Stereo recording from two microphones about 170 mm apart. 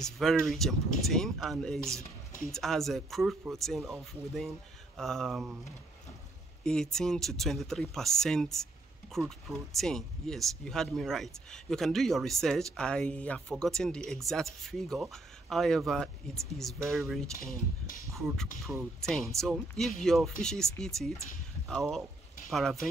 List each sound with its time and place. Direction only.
0.0 s speech: centre (ahead or behind)
4.9 s speech: centre (ahead or behind)
6.6 s speech: 5° left (ahead or behind)